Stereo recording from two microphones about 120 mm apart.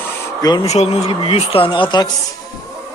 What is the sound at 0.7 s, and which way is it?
Speech, 65° left (ahead or behind).